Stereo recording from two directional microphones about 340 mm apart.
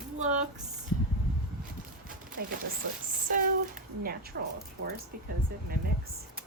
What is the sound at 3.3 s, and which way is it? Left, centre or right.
Speech, right.